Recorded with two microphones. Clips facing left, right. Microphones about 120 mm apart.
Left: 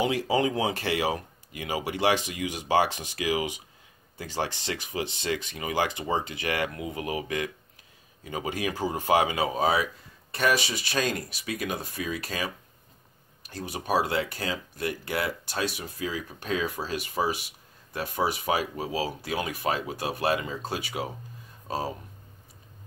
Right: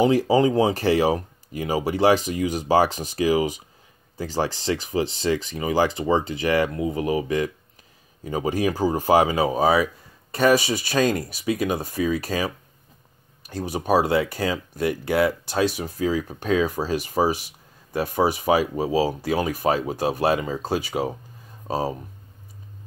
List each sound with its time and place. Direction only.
0.0 s speech: 35° right (ahead or behind)
13.6 s speech: 45° right (ahead or behind)